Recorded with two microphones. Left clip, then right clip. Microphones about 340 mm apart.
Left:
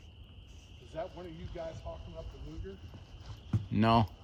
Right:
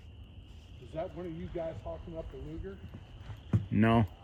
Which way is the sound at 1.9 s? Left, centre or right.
Left.